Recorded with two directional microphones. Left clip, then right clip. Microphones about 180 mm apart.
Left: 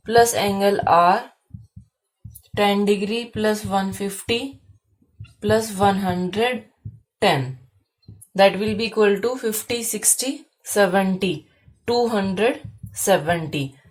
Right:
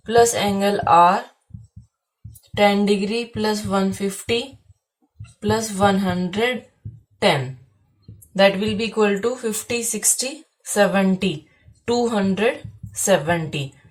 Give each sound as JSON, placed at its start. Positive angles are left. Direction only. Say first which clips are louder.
{"t": 0.0, "sound": "speech", "louder": "even", "side_deg": 30}
{"t": 2.6, "sound": "speech", "louder": "right 2 dB", "side_deg": 30}
{"t": 5.4, "sound": "speech", "louder": "left 1 dB", "side_deg": 30}
{"t": 8.3, "sound": "speech", "louder": "even", "side_deg": 35}